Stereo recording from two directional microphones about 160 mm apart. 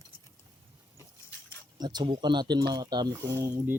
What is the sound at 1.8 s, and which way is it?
Speech, 25° right (ahead or behind).